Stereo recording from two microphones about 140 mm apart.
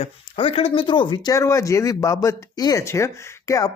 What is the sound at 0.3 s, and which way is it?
Speech, 40° left (ahead or behind).